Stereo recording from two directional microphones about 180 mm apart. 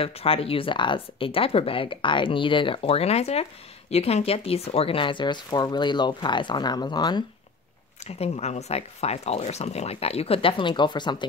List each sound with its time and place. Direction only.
0.0 s speech: 30° left (ahead or behind)
8.2 s speech: 35° left (ahead or behind)